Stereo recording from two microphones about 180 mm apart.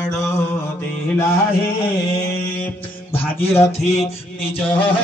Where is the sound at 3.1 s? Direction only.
10° left (ahead or behind).